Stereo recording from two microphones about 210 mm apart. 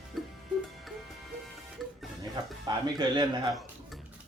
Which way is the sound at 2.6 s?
20° right (ahead or behind).